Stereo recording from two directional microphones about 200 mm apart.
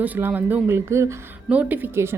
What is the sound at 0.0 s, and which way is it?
A woman's voice, 10° right (ahead or behind).